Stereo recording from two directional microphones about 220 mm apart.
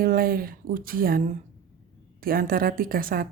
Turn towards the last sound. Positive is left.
turn(degrees=-40)  # may be behind; listen again after turning